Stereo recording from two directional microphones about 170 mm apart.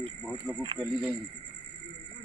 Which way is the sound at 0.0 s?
5° left (ahead or behind).